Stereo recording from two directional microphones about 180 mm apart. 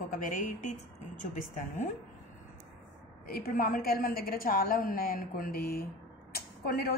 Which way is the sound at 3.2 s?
50° left (ahead or behind).